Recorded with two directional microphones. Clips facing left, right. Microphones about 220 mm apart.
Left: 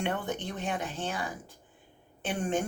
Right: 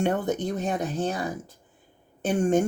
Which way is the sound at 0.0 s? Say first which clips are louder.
Right 7 dB; 40° right (ahead or behind).